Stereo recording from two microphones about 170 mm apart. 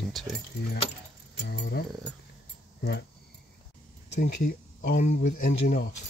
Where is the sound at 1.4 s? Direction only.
70° left (ahead or behind).